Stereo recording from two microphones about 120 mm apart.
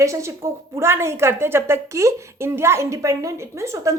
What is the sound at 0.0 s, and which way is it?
A woman's voice, 25° right (ahead or behind).